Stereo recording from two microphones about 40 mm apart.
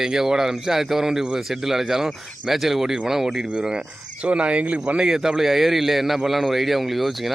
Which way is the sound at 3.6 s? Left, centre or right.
Right.